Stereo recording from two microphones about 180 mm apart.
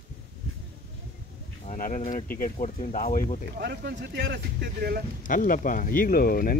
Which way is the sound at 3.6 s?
75° right (ahead or behind).